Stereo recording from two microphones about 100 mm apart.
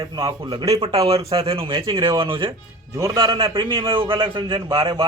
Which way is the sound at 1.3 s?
70° right (ahead or behind).